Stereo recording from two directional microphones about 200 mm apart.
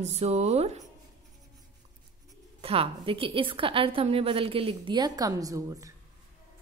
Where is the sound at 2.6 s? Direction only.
30° right (ahead or behind).